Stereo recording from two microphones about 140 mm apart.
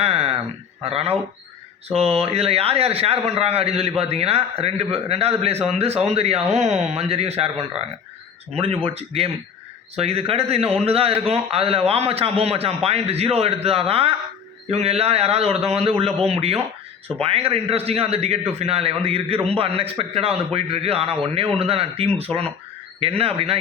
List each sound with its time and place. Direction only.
0.0 s a sound: 45° right (ahead or behind)
0.9 s a man's voice: 45° right (ahead or behind)
8.5 s a man's voice: 40° right (ahead or behind)